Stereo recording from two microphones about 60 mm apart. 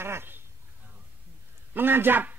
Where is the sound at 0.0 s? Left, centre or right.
Right.